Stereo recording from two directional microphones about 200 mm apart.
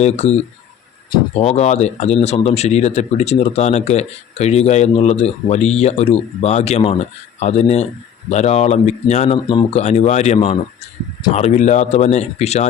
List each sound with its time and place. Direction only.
0.0 s speech: 35° left (ahead or behind)